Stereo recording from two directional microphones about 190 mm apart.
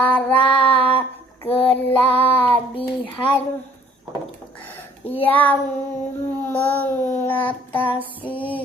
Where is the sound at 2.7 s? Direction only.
25° left (ahead or behind).